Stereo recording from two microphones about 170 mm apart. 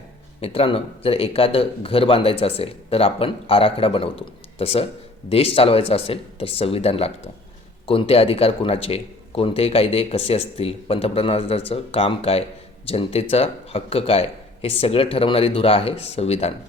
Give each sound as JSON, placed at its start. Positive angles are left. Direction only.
{"t": 0.4, "sound": "a man's voice", "side_deg": 35}